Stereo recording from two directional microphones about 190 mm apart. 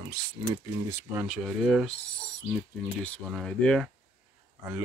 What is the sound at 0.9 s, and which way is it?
Speech, 10° right (ahead or behind).